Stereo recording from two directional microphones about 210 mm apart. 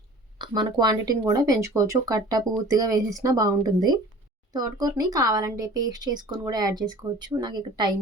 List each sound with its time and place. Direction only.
0.3 s speech: 20° right (ahead or behind)